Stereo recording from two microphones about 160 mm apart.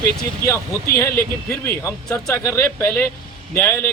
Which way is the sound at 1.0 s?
15° left (ahead or behind).